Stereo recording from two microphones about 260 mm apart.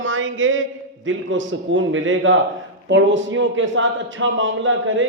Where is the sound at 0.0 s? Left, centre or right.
Right.